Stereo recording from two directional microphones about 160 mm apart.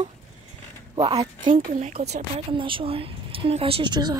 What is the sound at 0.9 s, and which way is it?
Speech, 35° right (ahead or behind).